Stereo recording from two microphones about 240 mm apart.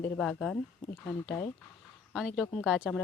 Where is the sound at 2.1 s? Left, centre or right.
Centre.